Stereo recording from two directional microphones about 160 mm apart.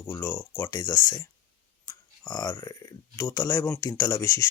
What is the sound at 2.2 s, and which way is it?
Speech, 20° left (ahead or behind).